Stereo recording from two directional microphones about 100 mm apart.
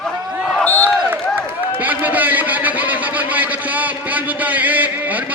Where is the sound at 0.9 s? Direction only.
20° right (ahead or behind).